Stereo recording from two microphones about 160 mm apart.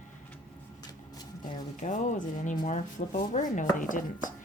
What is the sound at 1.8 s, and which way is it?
Chopping, 50° left (ahead or behind).